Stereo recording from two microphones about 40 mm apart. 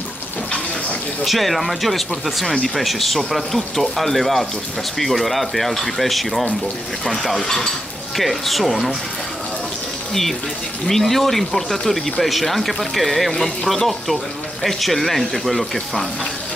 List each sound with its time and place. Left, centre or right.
1.2 s speech: centre
7.4 s speech: centre
8.2 s speech: centre
10.9 s speech: centre